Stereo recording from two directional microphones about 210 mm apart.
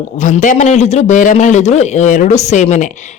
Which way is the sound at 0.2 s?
35° left (ahead or behind).